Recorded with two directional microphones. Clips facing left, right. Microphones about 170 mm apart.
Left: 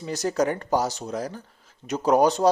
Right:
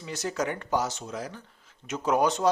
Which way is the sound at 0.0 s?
40° left (ahead or behind).